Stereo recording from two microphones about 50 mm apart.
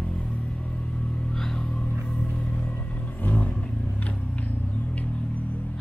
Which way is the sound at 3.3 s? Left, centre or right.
Left.